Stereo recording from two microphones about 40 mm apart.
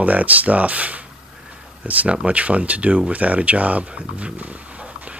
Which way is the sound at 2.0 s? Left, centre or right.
Right.